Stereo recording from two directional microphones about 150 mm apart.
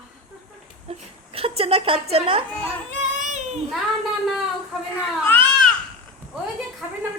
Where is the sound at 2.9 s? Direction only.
55° right (ahead or behind).